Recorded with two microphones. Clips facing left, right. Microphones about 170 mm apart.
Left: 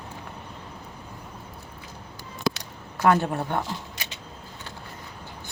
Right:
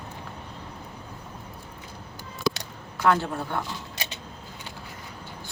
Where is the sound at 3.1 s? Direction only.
20° left (ahead or behind).